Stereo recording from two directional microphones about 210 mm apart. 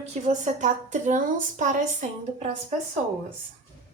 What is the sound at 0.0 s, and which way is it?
A woman's voice, 35° right (ahead or behind).